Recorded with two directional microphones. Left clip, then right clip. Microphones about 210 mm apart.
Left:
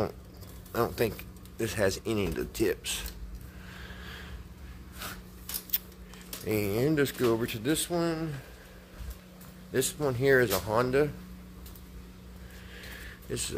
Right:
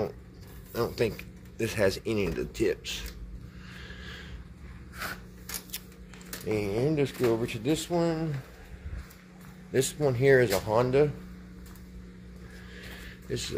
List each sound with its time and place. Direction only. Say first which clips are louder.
0.7 s speech: even; 10° left (ahead or behind)
3.8 s a sound: right 1 dB; 10° left (ahead or behind)
6.4 s speech: even; 20° left (ahead or behind)
7.4 s speech: right 1 dB; 15° left (ahead or behind)
9.7 s speech: right 3 dB; centre (ahead or behind)
12.7 s a sound: left 1 dB; 5° left (ahead or behind)